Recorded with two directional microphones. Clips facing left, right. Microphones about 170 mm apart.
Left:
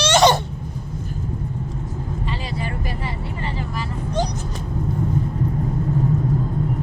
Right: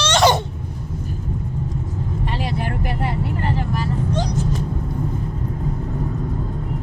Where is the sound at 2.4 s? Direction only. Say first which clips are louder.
Right 4 dB; 65° right (ahead or behind).